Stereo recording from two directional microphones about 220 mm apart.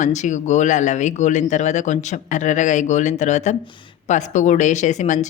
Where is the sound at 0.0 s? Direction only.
35° left (ahead or behind).